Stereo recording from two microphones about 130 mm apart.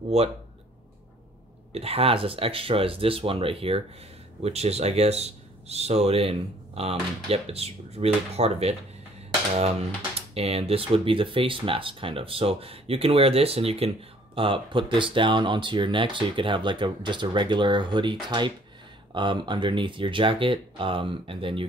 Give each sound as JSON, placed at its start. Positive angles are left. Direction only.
{"t": 1.7, "sound": "speech", "side_deg": -50}
{"t": 10.3, "sound": "speech", "side_deg": -50}